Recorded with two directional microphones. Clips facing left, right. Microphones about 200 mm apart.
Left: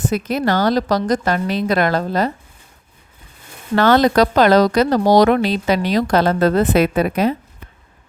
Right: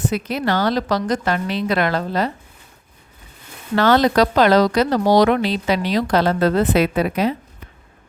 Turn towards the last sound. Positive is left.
turn(degrees=50)  # may be behind; listen again after turning